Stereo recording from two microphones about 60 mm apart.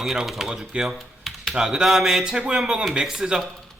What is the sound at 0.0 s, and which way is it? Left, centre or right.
Speech, centre.